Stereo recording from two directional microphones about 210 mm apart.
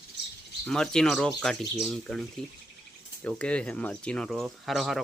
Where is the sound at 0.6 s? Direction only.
5° left (ahead or behind).